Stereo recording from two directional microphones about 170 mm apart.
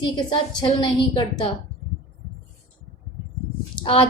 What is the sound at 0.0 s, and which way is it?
A woman's voice, 25° left (ahead or behind).